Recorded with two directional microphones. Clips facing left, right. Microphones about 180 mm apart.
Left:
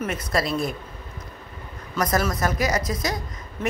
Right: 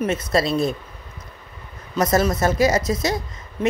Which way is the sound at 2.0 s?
25° right (ahead or behind).